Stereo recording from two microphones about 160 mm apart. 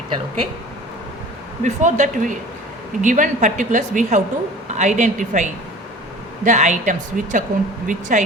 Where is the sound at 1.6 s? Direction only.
50° right (ahead or behind).